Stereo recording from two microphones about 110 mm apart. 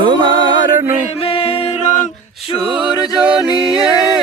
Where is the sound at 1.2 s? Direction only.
55° left (ahead or behind).